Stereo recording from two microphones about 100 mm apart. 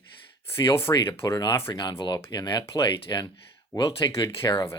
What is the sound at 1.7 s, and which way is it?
Speech, 45° left (ahead or behind).